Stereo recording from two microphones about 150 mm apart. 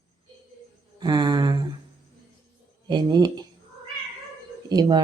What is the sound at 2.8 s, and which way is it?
Speech, 30° right (ahead or behind).